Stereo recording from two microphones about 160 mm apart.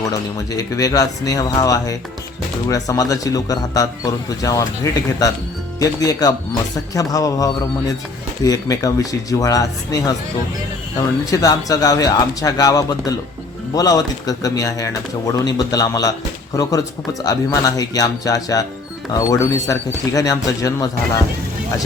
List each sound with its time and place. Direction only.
0.0 s a man's voice: 20° left (ahead or behind)
11.3 s a man's voice: 20° left (ahead or behind)